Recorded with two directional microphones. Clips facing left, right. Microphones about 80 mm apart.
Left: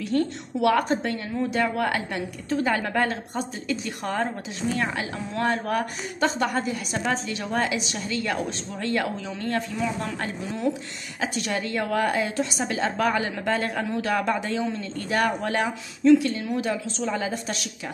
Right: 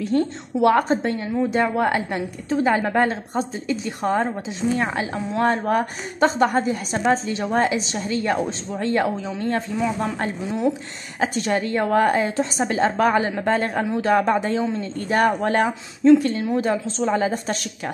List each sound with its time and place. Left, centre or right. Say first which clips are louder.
0.0 s a woman's voice: right 3 dB; right
13.8 s a woman's voice: right 5 dB; right
14.1 s a woman's voice: right 7 dB; right